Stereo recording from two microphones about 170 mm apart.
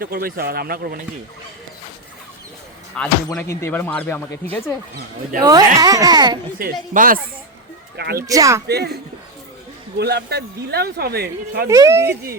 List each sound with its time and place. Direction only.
0.0 s speech: 60° right (ahead or behind)
3.0 s speech: 5° left (ahead or behind)
3.4 s speech: 15° left (ahead or behind)
5.4 s a child's voice: 25° right (ahead or behind)
6.6 s speech: 55° right (ahead or behind)
7.9 s speech: 75° right (ahead or behind)
8.3 s a child's voice: 20° right (ahead or behind)
8.6 s speech: 75° right (ahead or behind)
10.0 s speech: 75° right (ahead or behind)
11.7 s speech: 15° right (ahead or behind)